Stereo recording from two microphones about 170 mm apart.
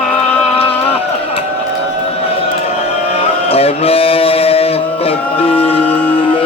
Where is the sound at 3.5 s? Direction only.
35° left (ahead or behind).